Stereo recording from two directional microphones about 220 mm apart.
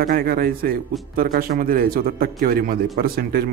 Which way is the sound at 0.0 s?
40° right (ahead or behind).